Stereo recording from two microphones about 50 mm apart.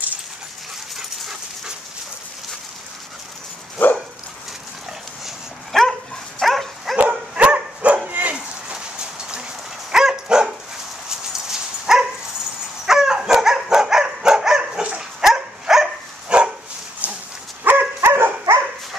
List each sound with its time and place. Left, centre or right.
0.9 s dog: centre
3.8 s dog: left
5.2 s dog: centre
7.0 s dog: right
8.7 s a sound: centre
9.8 s dog: centre
16.3 s dog: centre
17.6 s dog: right
18.1 s dog: right